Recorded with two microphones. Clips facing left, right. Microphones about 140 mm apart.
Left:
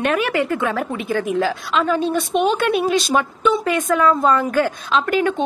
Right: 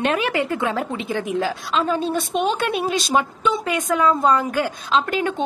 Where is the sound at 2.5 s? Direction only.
25° right (ahead or behind).